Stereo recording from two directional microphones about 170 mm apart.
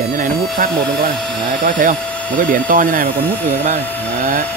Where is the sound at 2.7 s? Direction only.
55° right (ahead or behind).